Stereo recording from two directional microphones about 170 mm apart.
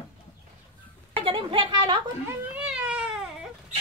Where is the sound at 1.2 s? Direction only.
30° right (ahead or behind).